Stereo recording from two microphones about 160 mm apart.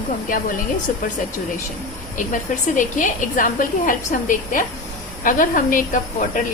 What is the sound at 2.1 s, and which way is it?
Speech, 55° left (ahead or behind).